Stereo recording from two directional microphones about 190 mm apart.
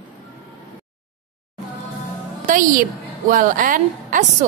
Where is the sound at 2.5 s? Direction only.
45° right (ahead or behind).